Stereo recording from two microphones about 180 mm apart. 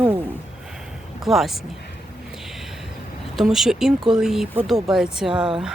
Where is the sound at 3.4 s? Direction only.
Centre (ahead or behind).